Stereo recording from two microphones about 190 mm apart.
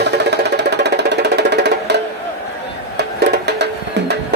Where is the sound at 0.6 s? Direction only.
65° right (ahead or behind).